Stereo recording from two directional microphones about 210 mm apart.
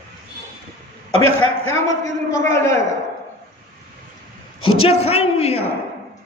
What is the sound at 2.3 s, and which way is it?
Speech, 15° left (ahead or behind).